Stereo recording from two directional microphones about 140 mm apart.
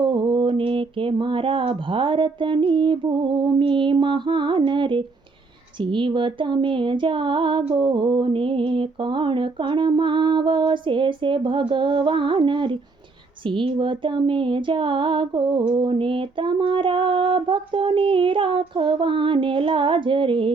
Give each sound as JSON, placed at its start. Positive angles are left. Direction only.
{"t": 0.0, "sound": "mantra", "side_deg": -35}